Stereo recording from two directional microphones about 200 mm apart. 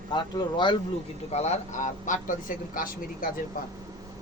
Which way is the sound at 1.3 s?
35° left (ahead or behind).